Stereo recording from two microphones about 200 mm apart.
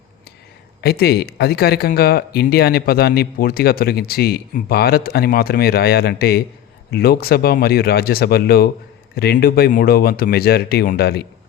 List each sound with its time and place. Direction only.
0.8 s speech: 55° left (ahead or behind)